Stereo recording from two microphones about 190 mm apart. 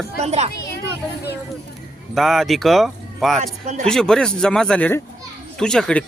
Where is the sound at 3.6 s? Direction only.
40° right (ahead or behind).